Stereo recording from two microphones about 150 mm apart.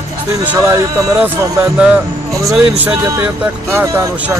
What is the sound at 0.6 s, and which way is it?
Speech, 20° right (ahead or behind).